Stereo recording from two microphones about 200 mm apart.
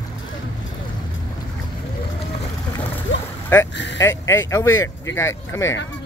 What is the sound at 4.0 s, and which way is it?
Speech, 15° left (ahead or behind).